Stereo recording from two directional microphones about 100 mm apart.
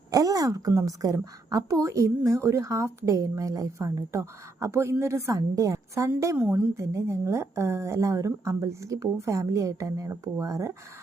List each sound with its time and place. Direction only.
0.1 s a woman's voice: 35° right (ahead or behind)
6.3 s a woman's voice: 20° right (ahead or behind)
6.7 s a woman's voice: 30° right (ahead or behind)